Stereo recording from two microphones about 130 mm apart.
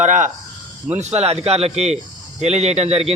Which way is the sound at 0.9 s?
60° right (ahead or behind).